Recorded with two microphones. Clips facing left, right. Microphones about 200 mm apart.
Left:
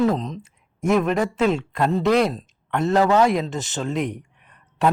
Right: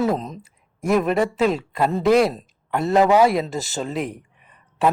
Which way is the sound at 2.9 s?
15° right (ahead or behind).